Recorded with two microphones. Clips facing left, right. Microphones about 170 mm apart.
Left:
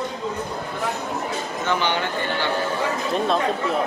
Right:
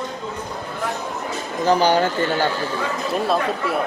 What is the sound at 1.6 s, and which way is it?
Speech, 40° right (ahead or behind).